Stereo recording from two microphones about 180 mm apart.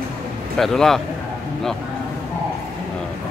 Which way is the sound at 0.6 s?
Centre (ahead or behind).